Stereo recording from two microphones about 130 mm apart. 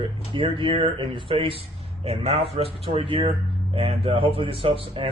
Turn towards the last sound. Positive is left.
turn(degrees=-45)  # may be behind; listen again after turning